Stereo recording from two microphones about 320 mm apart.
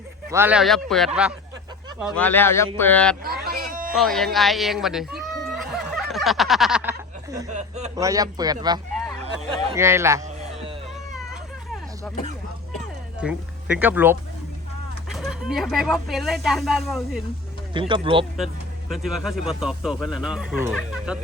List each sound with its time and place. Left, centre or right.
0.3 s speech: centre
3.2 s a sound: right
3.9 s speech: centre
5.9 s snicker: centre
7.9 s speech: centre
10.2 s music: right
13.1 s speech: centre
17.7 s speech: centre
18.3 s speech: centre